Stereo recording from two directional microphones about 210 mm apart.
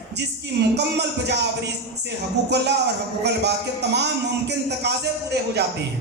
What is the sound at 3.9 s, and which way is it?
Speech, 55° right (ahead or behind).